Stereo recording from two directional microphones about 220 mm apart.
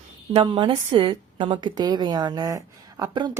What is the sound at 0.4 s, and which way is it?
A woman's voice, 20° right (ahead or behind).